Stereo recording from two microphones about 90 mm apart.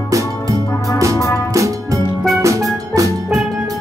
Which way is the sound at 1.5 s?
35° right (ahead or behind).